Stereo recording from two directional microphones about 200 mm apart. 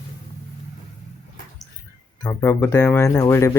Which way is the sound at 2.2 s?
10° left (ahead or behind).